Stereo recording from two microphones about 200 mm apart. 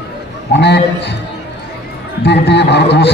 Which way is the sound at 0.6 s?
60° left (ahead or behind).